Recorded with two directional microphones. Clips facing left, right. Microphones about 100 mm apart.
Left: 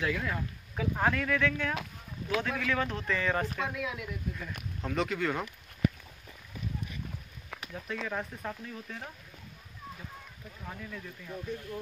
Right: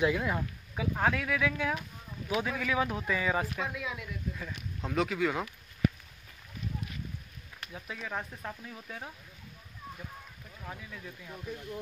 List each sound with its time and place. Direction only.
0.0 s speech: 20° right (ahead or behind)
0.7 s speech: centre (ahead or behind)
7.7 s speech: 5° right (ahead or behind)
10.6 s speech: 5° right (ahead or behind)